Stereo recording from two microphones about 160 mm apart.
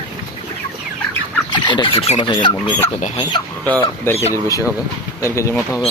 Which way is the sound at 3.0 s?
45° left (ahead or behind).